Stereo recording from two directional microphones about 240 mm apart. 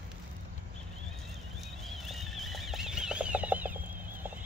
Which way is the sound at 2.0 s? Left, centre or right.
Centre.